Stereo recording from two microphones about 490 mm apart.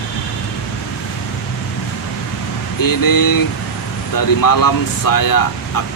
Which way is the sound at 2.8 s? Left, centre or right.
Left.